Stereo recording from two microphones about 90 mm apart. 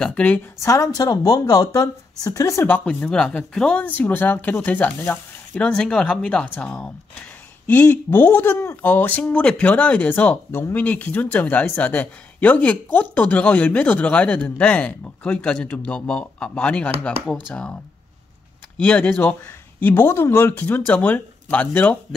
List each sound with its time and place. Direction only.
0.1 s speech: 15° left (ahead or behind)
0.6 s speech: 35° left (ahead or behind)
2.7 s speech: 15° left (ahead or behind)
5.7 s speech: 10° left (ahead or behind)
18.8 s speech: 15° left (ahead or behind)